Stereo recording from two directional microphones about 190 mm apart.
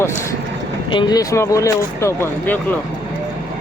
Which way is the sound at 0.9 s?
25° left (ahead or behind).